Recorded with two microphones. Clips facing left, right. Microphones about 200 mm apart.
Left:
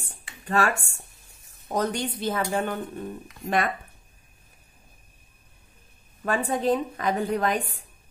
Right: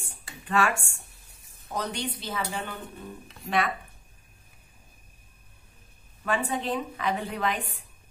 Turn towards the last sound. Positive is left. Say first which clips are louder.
# left 4 dB
turn(degrees=45)  # may be behind; listen again after turning